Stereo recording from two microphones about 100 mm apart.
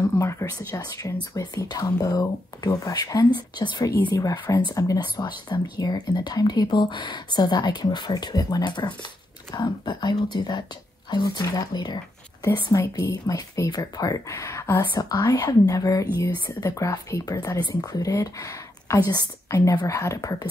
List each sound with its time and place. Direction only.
0.2 s speech: 30° left (ahead or behind)
0.6 s speech: 40° left (ahead or behind)
12.7 s speech: 30° left (ahead or behind)
15.0 s speech: 40° left (ahead or behind)